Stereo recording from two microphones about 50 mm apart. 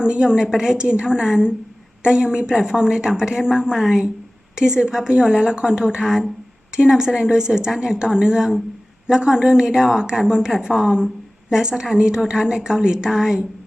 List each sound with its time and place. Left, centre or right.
0.0 s a woman's voice: centre